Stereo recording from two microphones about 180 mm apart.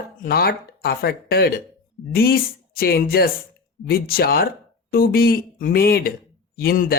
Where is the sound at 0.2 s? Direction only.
55° left (ahead or behind).